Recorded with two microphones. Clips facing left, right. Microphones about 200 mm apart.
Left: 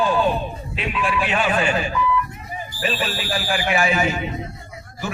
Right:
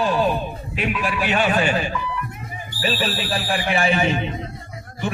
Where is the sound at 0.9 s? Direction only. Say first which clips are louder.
Left 1 dB; 40° right (ahead or behind).